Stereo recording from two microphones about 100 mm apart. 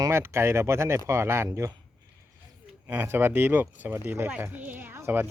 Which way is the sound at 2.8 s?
20° right (ahead or behind).